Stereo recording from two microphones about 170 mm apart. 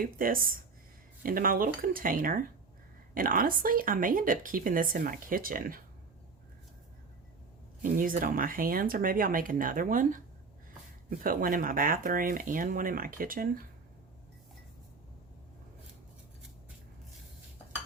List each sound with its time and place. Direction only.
0.0 s speech: 55° right (ahead or behind)
7.8 s speech: 55° right (ahead or behind)